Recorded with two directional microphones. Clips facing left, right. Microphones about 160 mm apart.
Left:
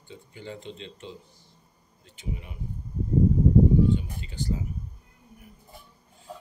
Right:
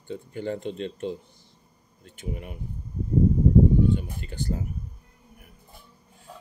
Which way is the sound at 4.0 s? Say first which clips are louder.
Right 1 dB; 55° right (ahead or behind).